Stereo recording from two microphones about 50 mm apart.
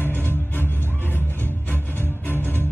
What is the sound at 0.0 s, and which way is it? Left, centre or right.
Music, left.